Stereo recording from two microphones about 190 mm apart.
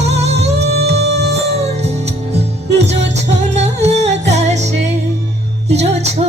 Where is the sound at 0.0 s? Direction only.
35° right (ahead or behind).